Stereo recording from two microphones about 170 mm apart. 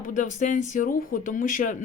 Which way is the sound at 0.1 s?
50° left (ahead or behind).